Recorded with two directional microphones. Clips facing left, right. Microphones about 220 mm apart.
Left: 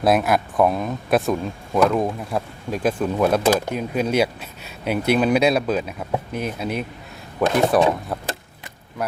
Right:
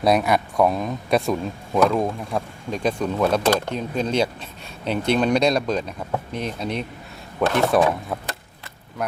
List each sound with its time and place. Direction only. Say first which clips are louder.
0.0 s speech: left 1 dB; centre (ahead or behind)
8.1 s speech: left 1 dB; centre (ahead or behind)